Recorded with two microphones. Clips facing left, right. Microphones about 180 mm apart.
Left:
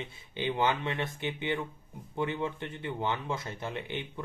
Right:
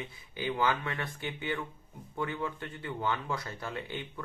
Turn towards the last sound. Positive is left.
turn(degrees=20)  # may be behind; listen again after turning